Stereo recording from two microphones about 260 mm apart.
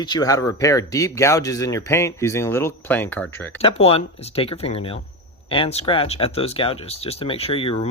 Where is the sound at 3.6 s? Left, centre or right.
Left.